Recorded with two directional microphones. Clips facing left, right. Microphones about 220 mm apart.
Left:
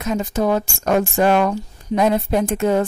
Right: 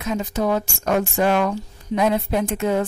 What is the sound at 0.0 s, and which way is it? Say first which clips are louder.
A woman's voice: left 3 dB; 45° left (ahead or behind).